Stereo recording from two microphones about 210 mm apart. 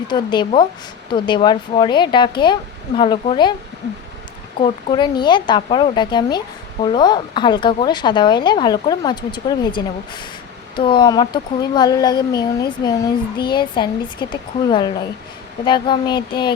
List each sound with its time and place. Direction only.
0.1 s speech: 20° left (ahead or behind)
4.6 s speech: 20° left (ahead or behind)